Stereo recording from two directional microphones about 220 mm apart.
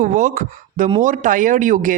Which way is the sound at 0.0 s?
35° right (ahead or behind).